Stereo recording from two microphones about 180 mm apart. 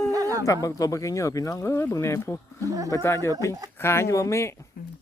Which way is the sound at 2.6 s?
20° right (ahead or behind).